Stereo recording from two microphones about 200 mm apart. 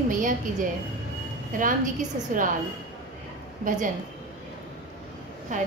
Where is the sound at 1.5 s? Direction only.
40° right (ahead or behind).